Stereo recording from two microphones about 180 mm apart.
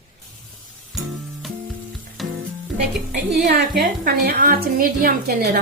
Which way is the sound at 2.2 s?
Centre (ahead or behind).